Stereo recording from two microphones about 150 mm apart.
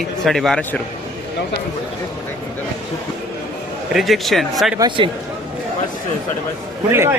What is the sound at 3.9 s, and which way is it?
Speech, centre (ahead or behind).